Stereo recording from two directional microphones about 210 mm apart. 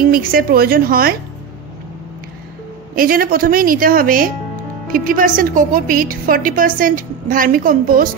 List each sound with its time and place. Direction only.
0.1 s a woman's voice: 45° right (ahead or behind)
3.0 s a woman's voice: 45° right (ahead or behind)